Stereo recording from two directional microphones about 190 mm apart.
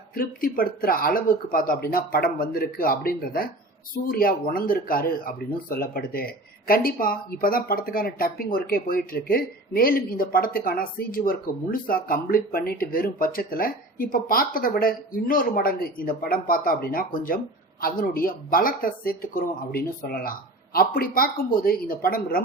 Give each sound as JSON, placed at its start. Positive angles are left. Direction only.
{"t": 0.1, "sound": "speech", "side_deg": 50}